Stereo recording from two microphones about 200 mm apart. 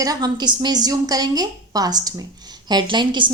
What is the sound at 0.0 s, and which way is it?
A woman's voice, 20° right (ahead or behind).